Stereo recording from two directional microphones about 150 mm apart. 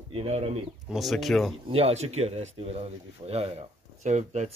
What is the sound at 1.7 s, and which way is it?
Speech, 40° right (ahead or behind).